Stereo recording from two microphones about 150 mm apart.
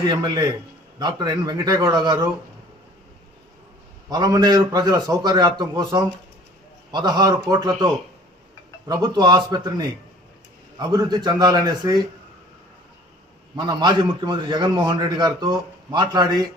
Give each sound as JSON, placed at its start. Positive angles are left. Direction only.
{"t": 0.1, "sound": "a man's voice", "side_deg": -30}
{"t": 4.1, "sound": "a man's voice", "side_deg": -25}
{"t": 8.9, "sound": "a man's voice", "side_deg": -25}
{"t": 13.6, "sound": "a man's voice", "side_deg": -30}